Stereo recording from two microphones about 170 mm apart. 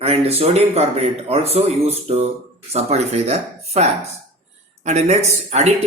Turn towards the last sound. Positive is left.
turn(degrees=-40)  # may be behind; listen again after turning